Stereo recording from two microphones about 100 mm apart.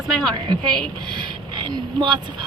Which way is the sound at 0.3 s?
50° right (ahead or behind).